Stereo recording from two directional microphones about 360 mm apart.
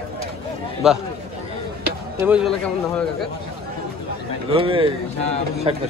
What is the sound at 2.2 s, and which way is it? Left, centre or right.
Speech, centre.